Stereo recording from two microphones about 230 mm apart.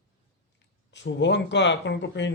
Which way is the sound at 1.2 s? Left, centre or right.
Left.